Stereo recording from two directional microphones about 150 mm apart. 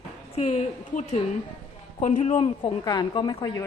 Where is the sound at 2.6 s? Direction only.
25° left (ahead or behind).